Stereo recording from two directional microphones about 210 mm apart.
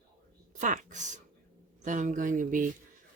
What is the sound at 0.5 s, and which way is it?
Speech, 35° right (ahead or behind).